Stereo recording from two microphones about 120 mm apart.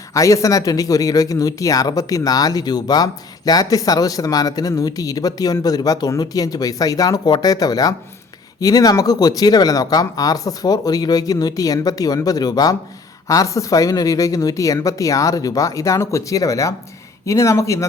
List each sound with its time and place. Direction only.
0.1 s speech: 25° left (ahead or behind)